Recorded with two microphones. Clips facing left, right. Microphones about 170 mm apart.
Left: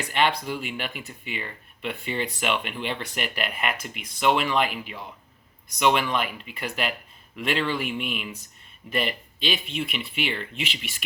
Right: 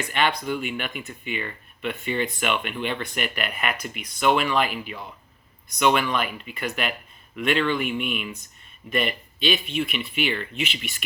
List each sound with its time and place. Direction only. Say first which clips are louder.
0.0 s speech: even; 30° left (ahead or behind)